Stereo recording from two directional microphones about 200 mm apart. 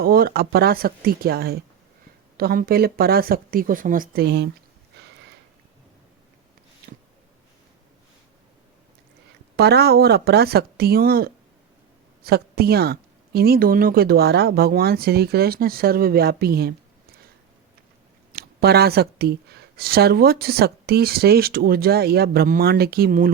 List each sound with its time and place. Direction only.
0.0 s speech: 50° right (ahead or behind)
9.6 s speech: 55° right (ahead or behind)
18.3 s speech: 50° right (ahead or behind)